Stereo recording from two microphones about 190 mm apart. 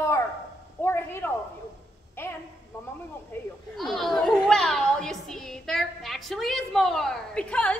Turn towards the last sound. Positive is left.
turn(degrees=5)  # may be behind; listen again after turning